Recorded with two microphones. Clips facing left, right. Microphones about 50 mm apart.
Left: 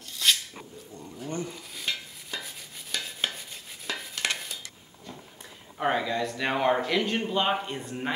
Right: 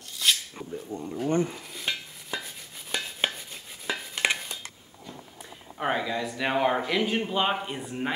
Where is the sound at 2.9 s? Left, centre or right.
Centre.